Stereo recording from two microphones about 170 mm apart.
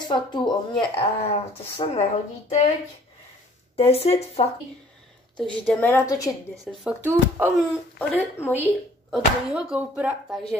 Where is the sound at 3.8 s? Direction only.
35° left (ahead or behind).